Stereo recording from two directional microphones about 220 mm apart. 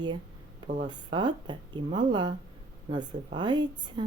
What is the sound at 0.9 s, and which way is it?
Speech, 20° right (ahead or behind).